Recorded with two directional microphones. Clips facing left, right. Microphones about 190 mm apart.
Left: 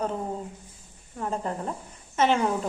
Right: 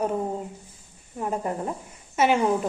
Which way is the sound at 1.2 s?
15° right (ahead or behind).